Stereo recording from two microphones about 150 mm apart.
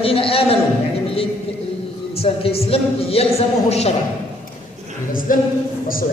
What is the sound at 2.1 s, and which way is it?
Speech, 40° left (ahead or behind).